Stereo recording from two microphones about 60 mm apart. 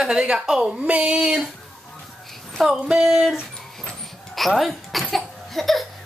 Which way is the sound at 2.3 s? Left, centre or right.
Centre.